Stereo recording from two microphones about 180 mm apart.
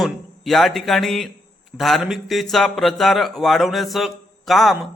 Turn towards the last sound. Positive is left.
turn(degrees=0)  # may be behind; listen again after turning